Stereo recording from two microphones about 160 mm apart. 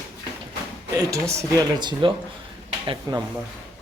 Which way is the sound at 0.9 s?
20° right (ahead or behind).